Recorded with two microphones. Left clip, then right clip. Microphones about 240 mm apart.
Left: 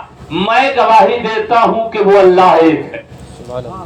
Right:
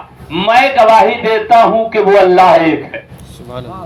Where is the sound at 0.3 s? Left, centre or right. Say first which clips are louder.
Right 2 dB; right.